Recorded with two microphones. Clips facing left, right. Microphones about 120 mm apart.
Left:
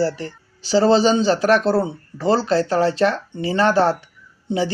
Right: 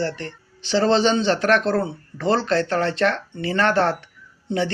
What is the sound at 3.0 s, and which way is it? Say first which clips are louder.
Speech: left 2 dB; 25° left (ahead or behind).